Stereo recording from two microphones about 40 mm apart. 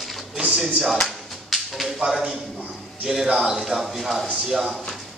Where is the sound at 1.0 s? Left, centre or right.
Centre.